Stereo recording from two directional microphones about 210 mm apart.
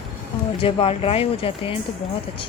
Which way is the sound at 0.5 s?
25° left (ahead or behind).